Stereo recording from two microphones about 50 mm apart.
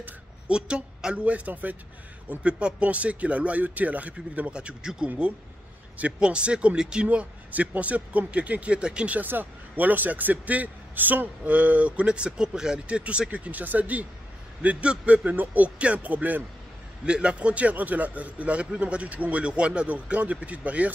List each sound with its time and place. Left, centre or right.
0.5 s a man's voice: centre
4.5 s a man's voice: centre
6.1 s a man's voice: centre
9.1 s speech: right
11.4 s a man's voice: right
15.2 s speech: right
17.0 s a man's voice: centre